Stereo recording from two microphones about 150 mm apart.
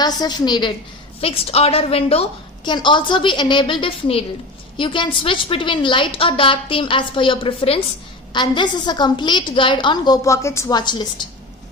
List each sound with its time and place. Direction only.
0.0 s a woman's voice: 30° left (ahead or behind)
1.2 s a woman's voice: 40° left (ahead or behind)